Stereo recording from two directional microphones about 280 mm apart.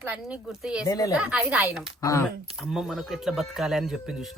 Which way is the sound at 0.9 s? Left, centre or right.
Centre.